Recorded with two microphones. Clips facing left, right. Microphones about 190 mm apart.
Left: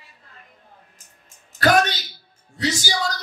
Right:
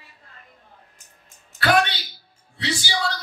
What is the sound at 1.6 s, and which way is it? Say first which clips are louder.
Speech: left 2 dB; 45° left (ahead or behind).